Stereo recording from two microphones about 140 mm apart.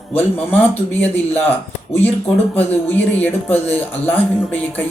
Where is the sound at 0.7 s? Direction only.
15° left (ahead or behind).